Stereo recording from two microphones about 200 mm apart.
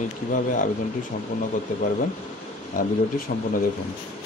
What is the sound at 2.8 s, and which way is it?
Speech, 45° left (ahead or behind).